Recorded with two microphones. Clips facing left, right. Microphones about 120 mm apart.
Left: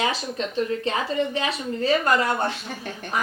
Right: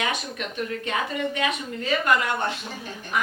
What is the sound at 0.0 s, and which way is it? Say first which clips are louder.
A woman's voice: left 3 dB; 30° left (ahead or behind).